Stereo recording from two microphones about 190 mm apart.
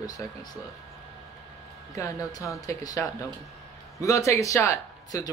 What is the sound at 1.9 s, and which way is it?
Speech, 20° left (ahead or behind).